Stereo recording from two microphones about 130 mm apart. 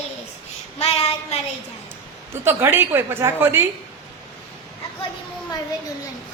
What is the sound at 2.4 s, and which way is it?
A woman's voice, 15° right (ahead or behind).